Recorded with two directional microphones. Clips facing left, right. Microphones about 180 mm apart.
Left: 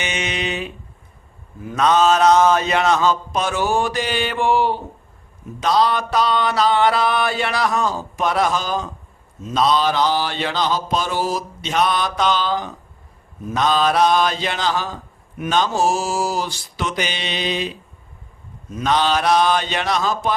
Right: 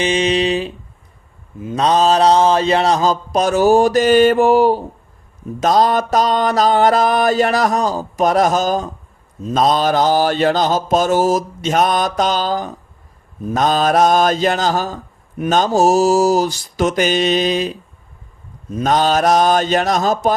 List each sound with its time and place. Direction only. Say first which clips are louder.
0.0 s speech: right 9 dB; 35° right (ahead or behind)
1.7 s speech: right 2 dB; 35° right (ahead or behind)
5.5 s mantra: right 4 dB; 45° right (ahead or behind)